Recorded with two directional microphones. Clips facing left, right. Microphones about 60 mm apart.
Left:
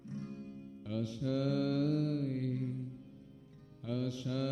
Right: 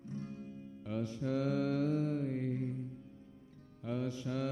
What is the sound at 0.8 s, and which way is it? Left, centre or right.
Mantra, right.